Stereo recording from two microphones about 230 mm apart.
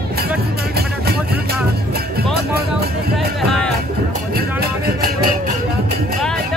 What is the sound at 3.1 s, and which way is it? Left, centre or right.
Music, centre.